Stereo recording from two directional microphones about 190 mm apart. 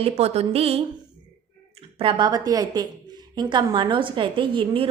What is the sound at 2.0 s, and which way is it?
A woman's voice, 25° right (ahead or behind).